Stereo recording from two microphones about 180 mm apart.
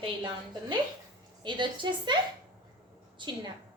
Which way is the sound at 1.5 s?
25° right (ahead or behind).